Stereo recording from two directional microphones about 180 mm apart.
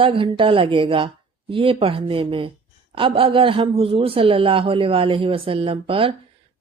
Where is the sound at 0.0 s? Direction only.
30° right (ahead or behind).